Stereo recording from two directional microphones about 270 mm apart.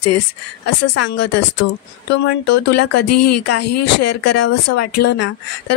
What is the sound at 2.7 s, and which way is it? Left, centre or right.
Speech, left.